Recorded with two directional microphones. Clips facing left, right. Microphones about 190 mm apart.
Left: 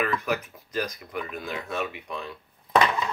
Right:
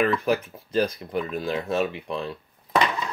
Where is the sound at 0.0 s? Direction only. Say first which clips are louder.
Right 5 dB; 30° right (ahead or behind).